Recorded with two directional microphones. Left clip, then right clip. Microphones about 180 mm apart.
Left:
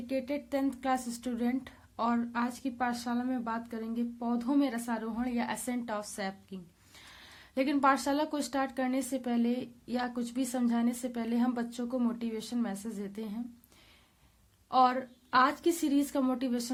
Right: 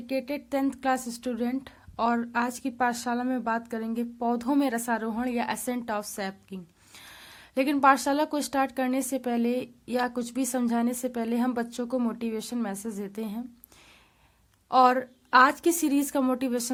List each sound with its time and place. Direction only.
0.1 s speech: 30° right (ahead or behind)
14.7 s speech: 40° right (ahead or behind)